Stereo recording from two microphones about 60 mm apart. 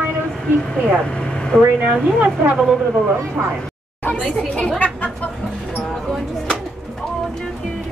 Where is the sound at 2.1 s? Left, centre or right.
Right.